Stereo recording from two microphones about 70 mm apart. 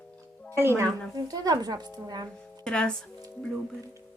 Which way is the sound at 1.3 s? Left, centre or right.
Right.